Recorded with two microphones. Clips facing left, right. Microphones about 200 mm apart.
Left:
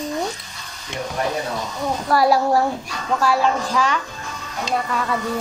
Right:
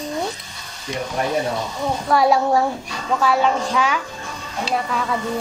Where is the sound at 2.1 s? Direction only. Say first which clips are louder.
Even; centre (ahead or behind).